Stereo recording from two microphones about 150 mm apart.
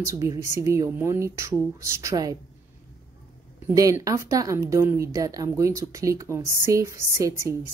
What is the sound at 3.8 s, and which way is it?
Speech, 20° right (ahead or behind).